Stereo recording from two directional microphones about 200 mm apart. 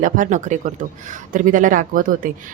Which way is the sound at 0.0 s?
40° right (ahead or behind).